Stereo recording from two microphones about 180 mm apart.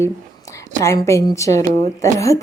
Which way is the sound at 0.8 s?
15° left (ahead or behind).